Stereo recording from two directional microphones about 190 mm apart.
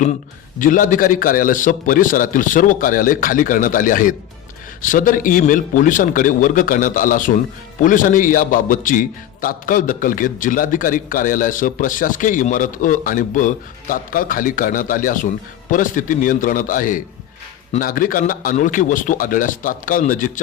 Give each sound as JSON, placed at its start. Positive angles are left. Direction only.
{"t": 0.6, "sound": "a man's voice", "side_deg": 45}